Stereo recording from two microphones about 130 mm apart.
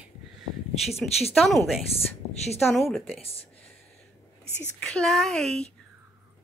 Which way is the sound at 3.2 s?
50° left (ahead or behind).